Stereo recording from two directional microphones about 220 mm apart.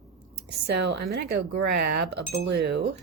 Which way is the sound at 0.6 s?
50° right (ahead or behind).